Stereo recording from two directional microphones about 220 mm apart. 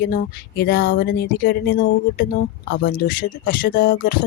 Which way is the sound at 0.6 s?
50° left (ahead or behind).